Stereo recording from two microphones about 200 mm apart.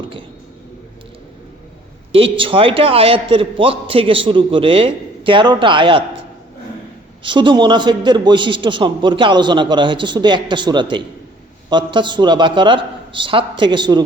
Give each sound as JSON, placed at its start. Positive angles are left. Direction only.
{"t": 2.1, "sound": "a man's voice", "side_deg": -25}
{"t": 7.2, "sound": "a man's voice", "side_deg": -25}